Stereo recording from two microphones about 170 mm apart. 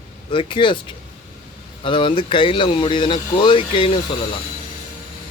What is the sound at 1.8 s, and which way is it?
Speech, 30° left (ahead or behind).